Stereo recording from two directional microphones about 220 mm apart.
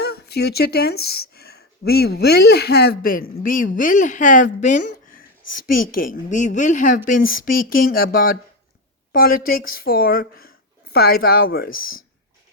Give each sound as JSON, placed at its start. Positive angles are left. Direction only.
{"t": 0.0, "sound": "a woman's voice", "side_deg": 45}